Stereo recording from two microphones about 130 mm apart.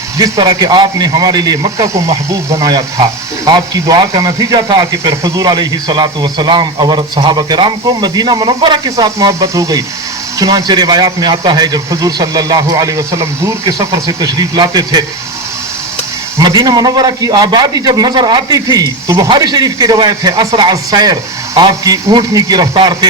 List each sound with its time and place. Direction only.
0.2 s a man's voice: 30° right (ahead or behind)
16.4 s a man's voice: 30° right (ahead or behind)